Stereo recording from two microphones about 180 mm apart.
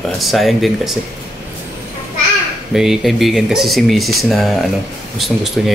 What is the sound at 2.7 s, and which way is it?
Speech, centre (ahead or behind).